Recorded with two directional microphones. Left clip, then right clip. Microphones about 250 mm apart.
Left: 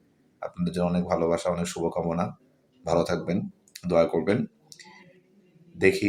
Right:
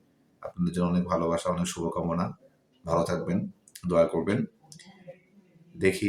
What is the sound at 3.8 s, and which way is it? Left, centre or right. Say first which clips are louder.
Speech: left 2 dB; centre.